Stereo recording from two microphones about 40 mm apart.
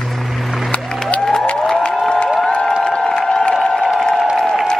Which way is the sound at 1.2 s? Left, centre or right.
Centre.